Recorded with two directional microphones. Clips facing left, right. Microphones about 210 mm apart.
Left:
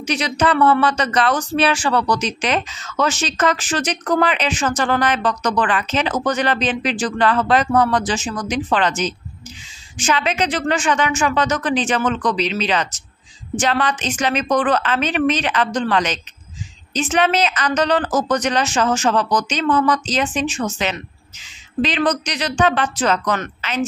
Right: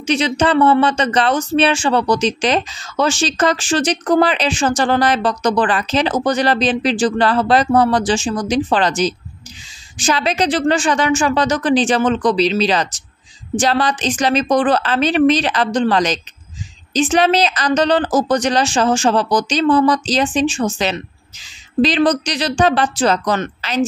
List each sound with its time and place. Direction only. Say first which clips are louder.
0.0 s speech: right 3 dB; 25° right (ahead or behind)